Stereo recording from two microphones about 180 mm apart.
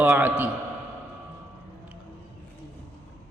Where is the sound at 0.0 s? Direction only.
10° right (ahead or behind).